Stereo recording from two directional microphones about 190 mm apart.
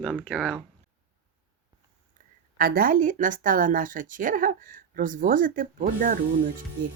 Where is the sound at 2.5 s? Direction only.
50° right (ahead or behind).